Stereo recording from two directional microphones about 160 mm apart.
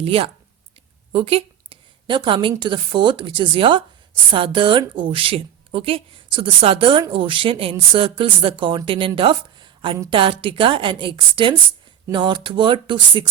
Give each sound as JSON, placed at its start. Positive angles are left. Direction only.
{"t": 0.0, "sound": "a woman's voice", "side_deg": -35}